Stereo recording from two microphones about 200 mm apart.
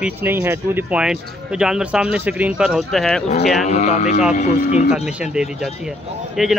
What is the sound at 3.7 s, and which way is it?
Speech, 35° left (ahead or behind).